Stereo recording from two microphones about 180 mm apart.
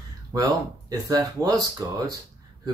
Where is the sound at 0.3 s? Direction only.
20° right (ahead or behind).